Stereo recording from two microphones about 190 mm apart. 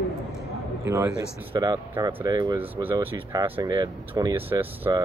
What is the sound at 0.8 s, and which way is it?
A man's voice, 15° right (ahead or behind).